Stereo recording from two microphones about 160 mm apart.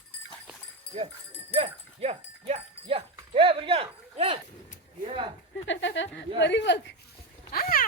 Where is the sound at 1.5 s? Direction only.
40° right (ahead or behind).